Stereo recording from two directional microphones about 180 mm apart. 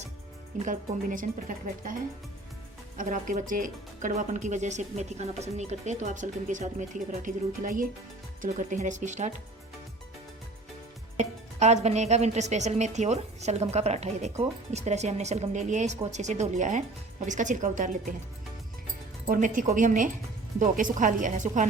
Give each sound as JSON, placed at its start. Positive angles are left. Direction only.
{"t": 0.6, "sound": "speech", "side_deg": -45}
{"t": 3.0, "sound": "speech", "side_deg": -45}
{"t": 11.2, "sound": "a woman's voice", "side_deg": -40}
{"t": 19.3, "sound": "speech", "side_deg": -50}